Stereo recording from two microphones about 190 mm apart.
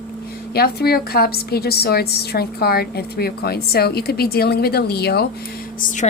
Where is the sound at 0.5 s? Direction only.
55° left (ahead or behind).